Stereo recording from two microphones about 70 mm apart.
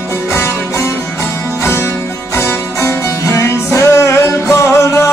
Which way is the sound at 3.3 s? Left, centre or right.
Left.